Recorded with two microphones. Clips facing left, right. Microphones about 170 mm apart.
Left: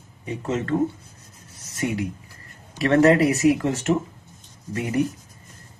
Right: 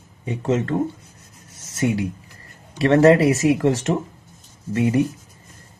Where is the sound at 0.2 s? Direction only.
30° right (ahead or behind).